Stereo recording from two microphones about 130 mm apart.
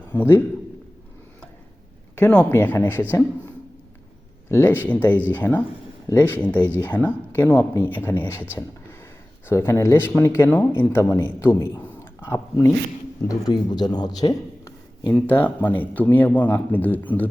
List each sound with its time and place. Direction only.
0.1 s a man's voice: 15° left (ahead or behind)
2.1 s a man's voice: 10° left (ahead or behind)
9.5 s a man's voice: 20° left (ahead or behind)
13.2 s a man's voice: 35° left (ahead or behind); by 17.2 s 15° left (ahead or behind)